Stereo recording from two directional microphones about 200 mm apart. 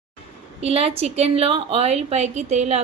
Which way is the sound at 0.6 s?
30° right (ahead or behind).